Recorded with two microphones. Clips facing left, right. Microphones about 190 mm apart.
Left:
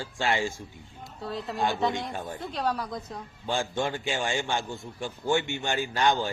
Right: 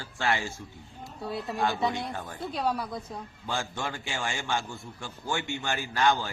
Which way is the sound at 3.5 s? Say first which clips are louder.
Left 5 dB; 20° left (ahead or behind).